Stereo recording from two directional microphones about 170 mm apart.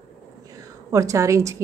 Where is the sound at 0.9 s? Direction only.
20° right (ahead or behind).